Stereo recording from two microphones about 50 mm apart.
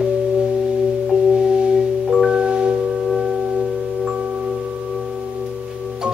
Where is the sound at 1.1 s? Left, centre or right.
Centre.